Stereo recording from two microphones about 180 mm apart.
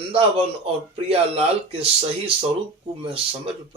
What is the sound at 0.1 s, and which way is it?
Speech, 35° right (ahead or behind).